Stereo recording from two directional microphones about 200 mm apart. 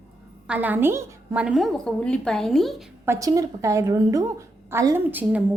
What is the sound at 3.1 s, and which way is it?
A woman's voice, 15° right (ahead or behind).